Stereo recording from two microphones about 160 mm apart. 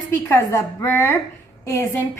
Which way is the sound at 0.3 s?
15° left (ahead or behind).